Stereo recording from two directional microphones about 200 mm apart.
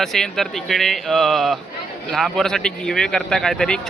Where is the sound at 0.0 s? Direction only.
Centre (ahead or behind).